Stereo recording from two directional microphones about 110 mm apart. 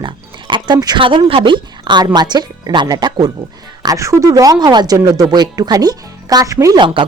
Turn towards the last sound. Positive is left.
turn(degrees=-30)  # may be behind; listen again after turning